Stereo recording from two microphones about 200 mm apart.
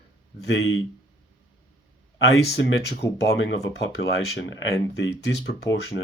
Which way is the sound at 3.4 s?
60° left (ahead or behind).